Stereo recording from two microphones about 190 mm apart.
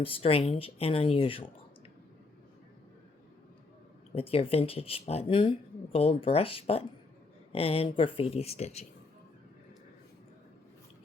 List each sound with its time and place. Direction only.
0.0 s speech: 30° left (ahead or behind)
4.1 s speech: 30° left (ahead or behind)